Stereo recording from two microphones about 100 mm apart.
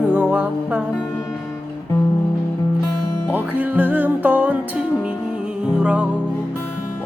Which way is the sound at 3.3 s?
15° right (ahead or behind).